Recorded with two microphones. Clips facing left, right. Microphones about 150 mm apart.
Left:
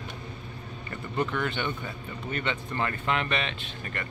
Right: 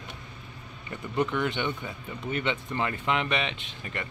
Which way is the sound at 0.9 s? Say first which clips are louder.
Right 2 dB; 15° right (ahead or behind).